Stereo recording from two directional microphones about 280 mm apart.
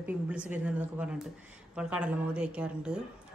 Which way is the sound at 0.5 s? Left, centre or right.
Centre.